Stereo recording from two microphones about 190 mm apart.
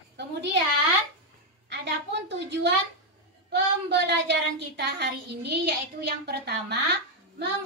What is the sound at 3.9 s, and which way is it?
Child singing, 60° right (ahead or behind).